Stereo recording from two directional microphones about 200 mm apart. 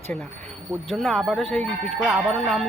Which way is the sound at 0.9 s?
Centre (ahead or behind).